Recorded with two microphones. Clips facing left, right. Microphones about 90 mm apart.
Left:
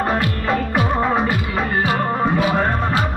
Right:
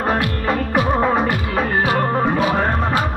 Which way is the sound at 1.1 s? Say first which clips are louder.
Right 1 dB; 5° right (ahead or behind).